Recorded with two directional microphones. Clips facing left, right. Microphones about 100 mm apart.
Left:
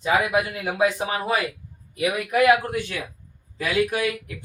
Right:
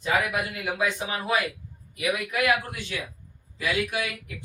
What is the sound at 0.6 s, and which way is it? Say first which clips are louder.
Speech: left 5 dB; 40° left (ahead or behind).